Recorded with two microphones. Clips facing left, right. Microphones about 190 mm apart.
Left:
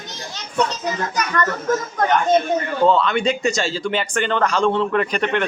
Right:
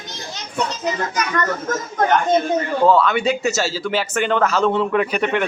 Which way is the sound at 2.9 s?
5° right (ahead or behind).